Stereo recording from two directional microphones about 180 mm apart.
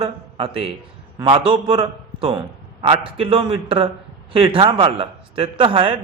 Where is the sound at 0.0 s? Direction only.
30° right (ahead or behind).